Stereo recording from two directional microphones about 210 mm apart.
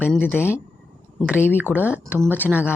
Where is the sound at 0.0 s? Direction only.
5° right (ahead or behind).